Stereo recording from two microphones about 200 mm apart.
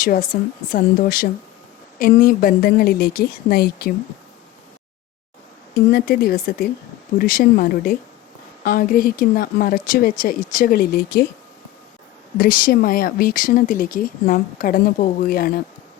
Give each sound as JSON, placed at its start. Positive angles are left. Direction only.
{"t": 0.0, "sound": "speech", "side_deg": 45}
{"t": 5.9, "sound": "speech", "side_deg": 50}
{"t": 12.4, "sound": "speech", "side_deg": 45}